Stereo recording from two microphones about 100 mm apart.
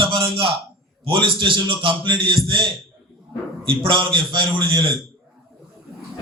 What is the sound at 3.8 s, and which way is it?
A man's voice, 60° right (ahead or behind).